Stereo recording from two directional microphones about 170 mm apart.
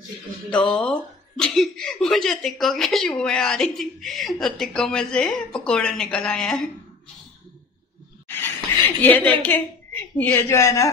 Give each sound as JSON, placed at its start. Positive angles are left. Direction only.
{"t": 0.5, "sound": "speech", "side_deg": 5}
{"t": 8.3, "sound": "a sound", "side_deg": 15}
{"t": 10.1, "sound": "a woman's voice", "side_deg": 10}